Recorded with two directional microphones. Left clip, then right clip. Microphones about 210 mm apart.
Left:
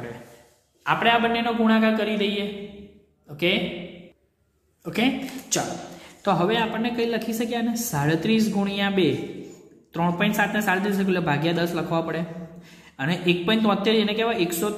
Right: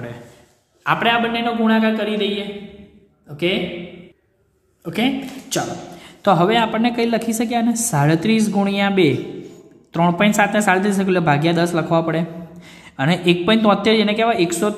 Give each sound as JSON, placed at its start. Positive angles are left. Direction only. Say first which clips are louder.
{"t": 0.8, "sound": "a man's voice", "louder": "right 3 dB", "side_deg": -20}
{"t": 4.8, "sound": "a man's voice", "louder": "right 3 dB", "side_deg": -10}
{"t": 5.9, "sound": "a woman's voice", "louder": "right 8 dB", "side_deg": -25}